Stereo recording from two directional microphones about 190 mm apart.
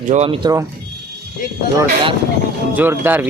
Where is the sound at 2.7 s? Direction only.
10° right (ahead or behind).